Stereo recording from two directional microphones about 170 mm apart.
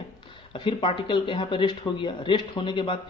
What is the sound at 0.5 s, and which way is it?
Speech, 30° left (ahead or behind).